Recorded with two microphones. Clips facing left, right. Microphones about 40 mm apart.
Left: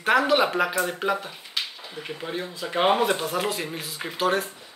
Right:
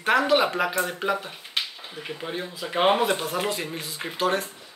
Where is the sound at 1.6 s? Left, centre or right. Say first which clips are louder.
Right 1 dB; right.